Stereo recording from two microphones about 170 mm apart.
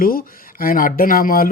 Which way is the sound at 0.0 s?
60° left (ahead or behind).